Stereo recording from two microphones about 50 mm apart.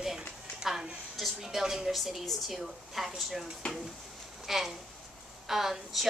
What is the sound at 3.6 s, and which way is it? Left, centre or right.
Speech, left.